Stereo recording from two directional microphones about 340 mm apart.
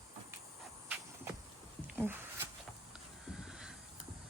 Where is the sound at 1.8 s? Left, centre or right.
Centre.